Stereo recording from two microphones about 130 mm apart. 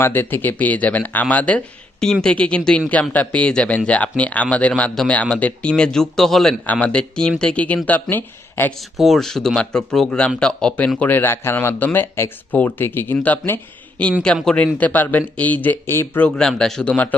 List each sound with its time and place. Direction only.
0.0 s speech: 15° left (ahead or behind)
8.8 s speech: centre (ahead or behind); by 16.3 s 15° left (ahead or behind)
16.3 s speech: 5° left (ahead or behind)